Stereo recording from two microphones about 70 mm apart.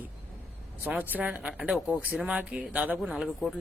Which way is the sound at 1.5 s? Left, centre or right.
Centre.